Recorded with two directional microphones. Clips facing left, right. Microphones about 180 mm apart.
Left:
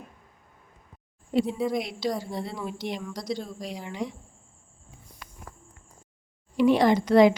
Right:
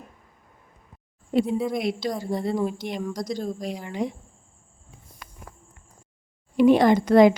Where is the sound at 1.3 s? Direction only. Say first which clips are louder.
Right 2 dB; 55° right (ahead or behind).